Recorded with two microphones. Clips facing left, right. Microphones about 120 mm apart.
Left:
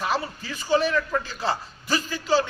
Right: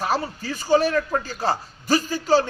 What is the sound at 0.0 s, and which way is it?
A man's voice, 40° right (ahead or behind).